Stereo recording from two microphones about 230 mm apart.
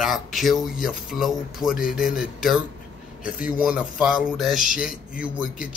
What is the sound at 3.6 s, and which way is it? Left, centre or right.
Speech, centre.